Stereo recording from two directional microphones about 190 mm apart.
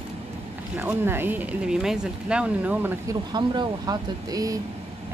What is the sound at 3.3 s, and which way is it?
Speech, 20° right (ahead or behind).